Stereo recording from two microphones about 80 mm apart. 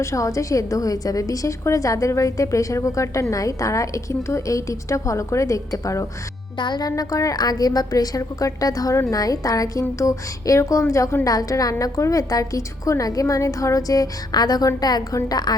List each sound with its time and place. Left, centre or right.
0.0 s a woman's voice: left
6.6 s a woman's voice: left